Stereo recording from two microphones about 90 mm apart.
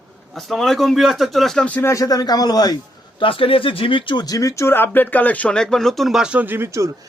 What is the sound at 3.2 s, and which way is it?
Speech, 85° left.